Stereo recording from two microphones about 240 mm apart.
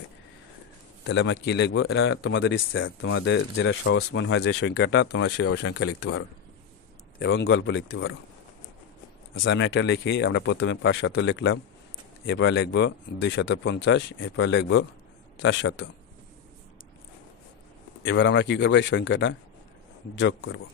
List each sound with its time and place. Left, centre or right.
1.0 s speech: left
7.2 s speech: left
9.4 s speech: left
18.0 s speech: left